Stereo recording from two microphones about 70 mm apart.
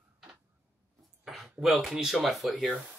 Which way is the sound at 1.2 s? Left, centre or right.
Centre.